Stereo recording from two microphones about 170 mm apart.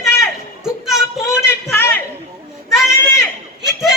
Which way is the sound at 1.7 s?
10° left (ahead or behind).